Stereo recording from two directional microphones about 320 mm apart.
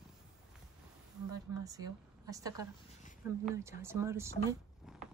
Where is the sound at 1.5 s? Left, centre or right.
Centre.